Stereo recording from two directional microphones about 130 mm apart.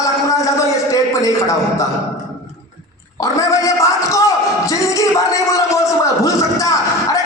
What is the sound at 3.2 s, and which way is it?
Music, 25° left (ahead or behind).